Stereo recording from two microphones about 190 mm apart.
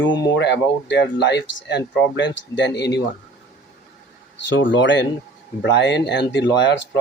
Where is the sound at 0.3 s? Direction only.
65° left (ahead or behind).